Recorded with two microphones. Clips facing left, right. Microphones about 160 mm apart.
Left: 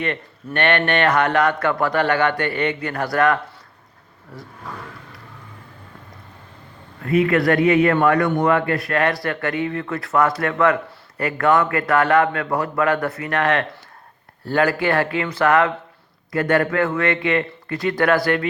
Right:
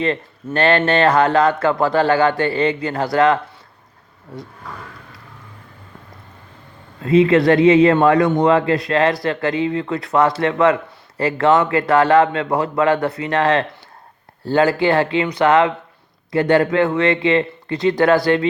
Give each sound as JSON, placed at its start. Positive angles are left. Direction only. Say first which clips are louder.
{"t": 0.0, "sound": "speech", "louder": "right 5 dB", "side_deg": -30}
{"t": 7.0, "sound": "speech", "louder": "right 5 dB", "side_deg": -25}